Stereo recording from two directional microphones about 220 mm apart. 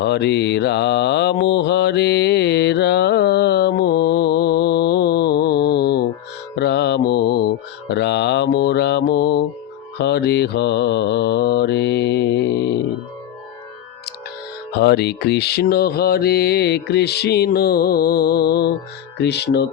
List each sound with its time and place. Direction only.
0.0 s mantra: 50° left (ahead or behind)
14.7 s mantra: 50° left (ahead or behind)